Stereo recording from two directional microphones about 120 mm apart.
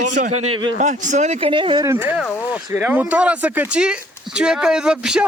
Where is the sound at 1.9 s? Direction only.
15° right (ahead or behind).